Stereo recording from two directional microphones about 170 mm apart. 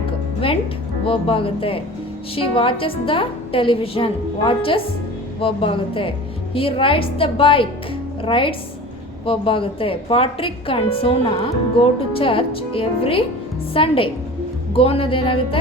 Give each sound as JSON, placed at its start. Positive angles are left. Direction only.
{"t": 1.0, "sound": "a woman's voice", "side_deg": 30}